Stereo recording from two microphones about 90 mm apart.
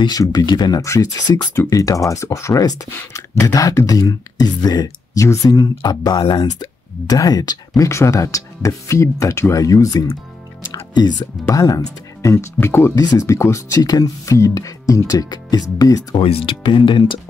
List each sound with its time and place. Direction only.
0.0 s speech: 45° left (ahead or behind)
0.8 s speech: 35° left (ahead or behind)
10.6 s music: 50° left (ahead or behind)
11.5 s speech: 40° left (ahead or behind)
12.5 s speech: 25° left (ahead or behind)
12.9 s speech: 45° left (ahead or behind)
13.3 s speech: 30° left (ahead or behind)
16.2 s speech: 90° left; by 17.2 s 60° left (ahead or behind)